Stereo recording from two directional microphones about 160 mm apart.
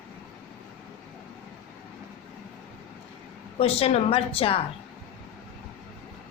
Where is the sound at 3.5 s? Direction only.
40° left (ahead or behind).